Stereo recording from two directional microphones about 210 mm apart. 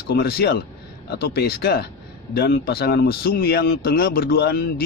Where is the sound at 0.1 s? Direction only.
50° left (ahead or behind).